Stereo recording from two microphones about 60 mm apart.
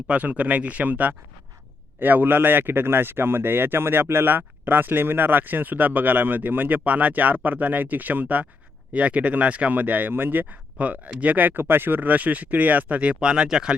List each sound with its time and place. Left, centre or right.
0.1 s speech: right